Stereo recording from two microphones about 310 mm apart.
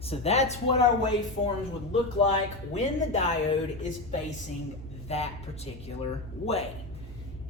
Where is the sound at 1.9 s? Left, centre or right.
Centre.